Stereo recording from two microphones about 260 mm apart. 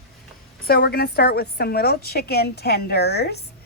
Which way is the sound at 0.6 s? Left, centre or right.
Left.